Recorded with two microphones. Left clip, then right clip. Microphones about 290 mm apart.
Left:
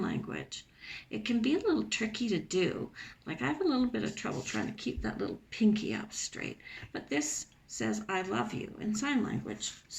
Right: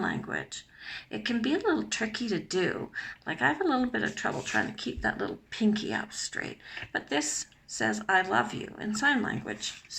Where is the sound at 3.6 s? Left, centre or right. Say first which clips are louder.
Right 3 dB; right.